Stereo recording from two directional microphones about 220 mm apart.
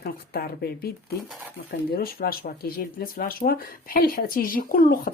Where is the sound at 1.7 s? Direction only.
45° left (ahead or behind).